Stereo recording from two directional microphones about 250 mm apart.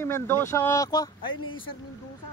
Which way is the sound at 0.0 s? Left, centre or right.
Centre.